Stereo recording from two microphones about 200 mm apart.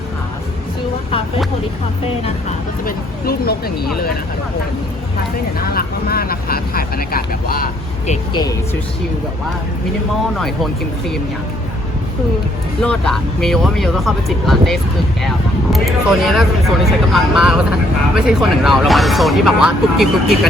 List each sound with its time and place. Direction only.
2.8 s speech: 50° left (ahead or behind)
5.7 s speech: 50° left (ahead or behind)
8.3 s speech: 20° left (ahead or behind)
10.3 s speech: centre (ahead or behind)
12.8 s speech: 5° left (ahead or behind)